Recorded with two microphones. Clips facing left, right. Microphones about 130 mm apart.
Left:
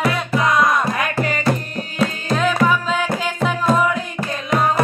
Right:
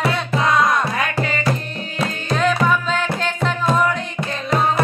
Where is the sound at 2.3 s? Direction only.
5° left (ahead or behind).